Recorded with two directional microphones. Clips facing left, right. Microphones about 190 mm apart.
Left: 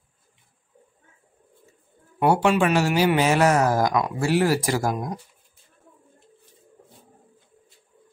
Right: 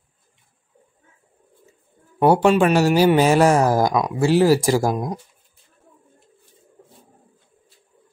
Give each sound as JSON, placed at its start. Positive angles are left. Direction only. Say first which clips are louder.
{"t": 2.1, "sound": "speech", "louder": "right 4 dB", "side_deg": -35}